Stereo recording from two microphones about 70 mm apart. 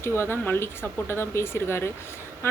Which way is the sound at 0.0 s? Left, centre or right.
Left.